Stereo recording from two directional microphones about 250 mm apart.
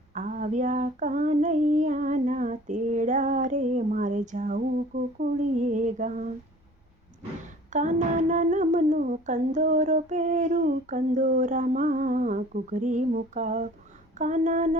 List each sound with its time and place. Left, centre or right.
0.1 s humming: right
7.7 s humming: right